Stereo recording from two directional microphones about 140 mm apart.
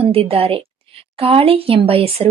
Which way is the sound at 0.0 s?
45° right (ahead or behind).